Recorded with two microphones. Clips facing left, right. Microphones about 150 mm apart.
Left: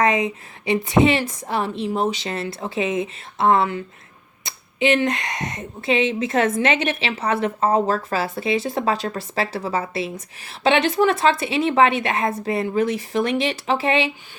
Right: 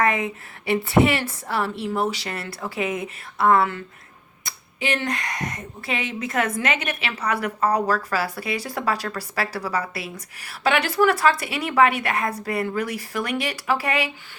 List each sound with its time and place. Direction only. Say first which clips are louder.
0.0 s a woman's voice: left 3 dB; 20° left (ahead or behind)